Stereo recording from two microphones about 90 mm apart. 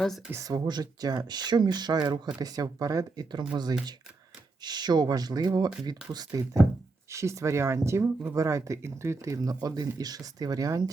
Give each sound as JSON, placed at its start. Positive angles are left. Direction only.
{"t": 0.3, "sound": "speech", "side_deg": -40}